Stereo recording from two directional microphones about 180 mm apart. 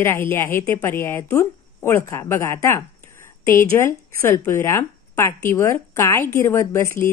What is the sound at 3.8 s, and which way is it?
A woman's voice, 15° left (ahead or behind).